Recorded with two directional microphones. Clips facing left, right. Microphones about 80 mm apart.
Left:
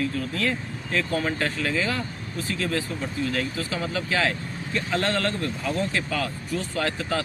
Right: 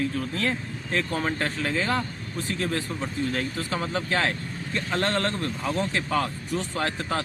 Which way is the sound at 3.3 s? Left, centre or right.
Right.